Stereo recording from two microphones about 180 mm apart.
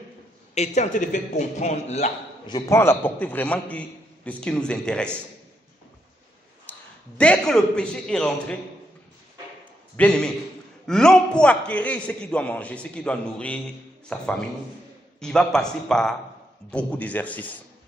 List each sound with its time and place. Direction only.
0.5 s a man's voice: 40° left (ahead or behind)
2.5 s a man's voice: 20° left (ahead or behind)
6.7 s a sound: 10° left (ahead or behind)
7.2 s a man's voice: 5° left (ahead or behind)
10.0 s a man's voice: 5° left (ahead or behind)